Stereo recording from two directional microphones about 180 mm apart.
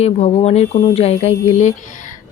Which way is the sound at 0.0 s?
35° left (ahead or behind).